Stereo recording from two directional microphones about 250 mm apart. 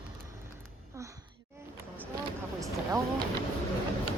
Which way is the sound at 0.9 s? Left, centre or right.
Centre.